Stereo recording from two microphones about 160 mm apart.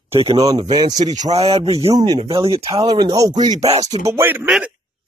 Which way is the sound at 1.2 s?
40° right (ahead or behind).